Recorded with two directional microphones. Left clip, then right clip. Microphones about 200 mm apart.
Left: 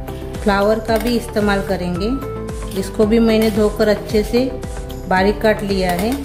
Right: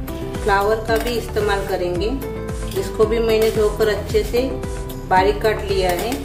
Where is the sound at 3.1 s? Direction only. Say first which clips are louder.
Left 3 dB; 45° left (ahead or behind).